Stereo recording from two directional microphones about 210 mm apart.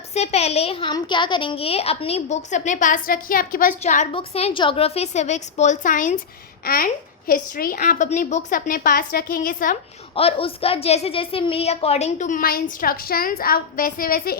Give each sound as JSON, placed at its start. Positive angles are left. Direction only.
{"t": 0.1, "sound": "a child's voice", "side_deg": 30}
{"t": 10.2, "sound": "a child's voice", "side_deg": 25}